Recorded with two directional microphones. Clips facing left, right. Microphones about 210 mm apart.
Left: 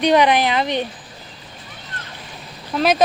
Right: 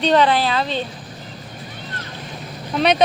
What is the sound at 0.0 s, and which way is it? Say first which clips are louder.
Speech: left 1 dB; 15° left (ahead or behind).